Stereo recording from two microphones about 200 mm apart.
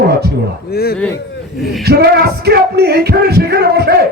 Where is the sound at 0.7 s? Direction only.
50° left (ahead or behind).